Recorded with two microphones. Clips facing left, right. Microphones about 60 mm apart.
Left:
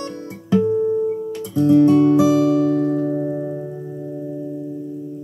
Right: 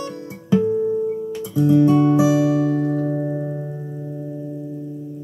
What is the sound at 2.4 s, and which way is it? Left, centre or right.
Music, right.